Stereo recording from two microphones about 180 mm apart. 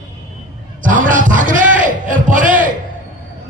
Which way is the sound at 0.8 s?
45° right (ahead or behind).